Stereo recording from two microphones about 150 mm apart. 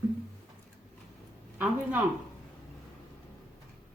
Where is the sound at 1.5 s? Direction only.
10° right (ahead or behind).